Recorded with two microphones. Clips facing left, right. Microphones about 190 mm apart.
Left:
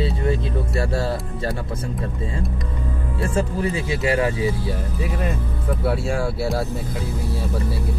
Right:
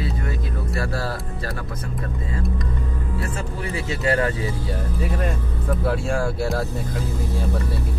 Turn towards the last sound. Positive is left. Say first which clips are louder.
# even
turn(degrees=5)  # may be behind; listen again after turning